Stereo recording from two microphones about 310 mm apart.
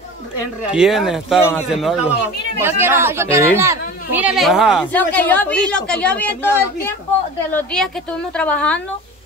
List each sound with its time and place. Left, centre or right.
0.7 s speech: centre